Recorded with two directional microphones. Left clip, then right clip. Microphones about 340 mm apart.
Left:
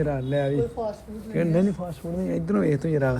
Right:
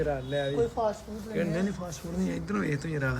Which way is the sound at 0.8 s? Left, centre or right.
Right.